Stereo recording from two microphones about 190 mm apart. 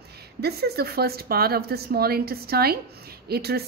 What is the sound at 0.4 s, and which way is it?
A woman's voice, 55° right (ahead or behind).